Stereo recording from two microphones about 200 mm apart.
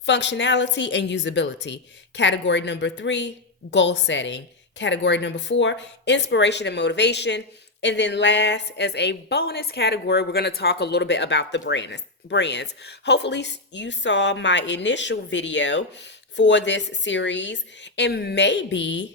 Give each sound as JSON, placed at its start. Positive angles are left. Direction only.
{"t": 0.0, "sound": "speech", "side_deg": 60}